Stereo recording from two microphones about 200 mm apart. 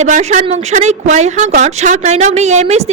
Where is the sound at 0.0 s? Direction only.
35° right (ahead or behind).